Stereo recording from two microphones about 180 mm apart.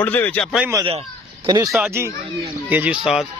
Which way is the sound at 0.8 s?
30° right (ahead or behind).